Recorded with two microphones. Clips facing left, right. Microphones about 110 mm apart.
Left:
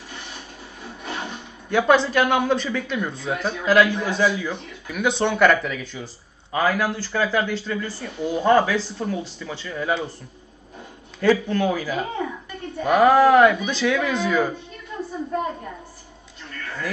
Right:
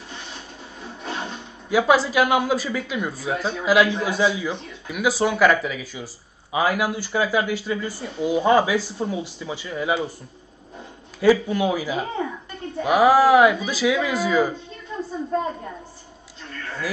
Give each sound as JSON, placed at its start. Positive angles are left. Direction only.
{"t": 0.8, "sound": "a sound", "side_deg": -20}
{"t": 1.7, "sound": "a man's voice", "side_deg": -5}
{"t": 11.1, "sound": "speech", "side_deg": -10}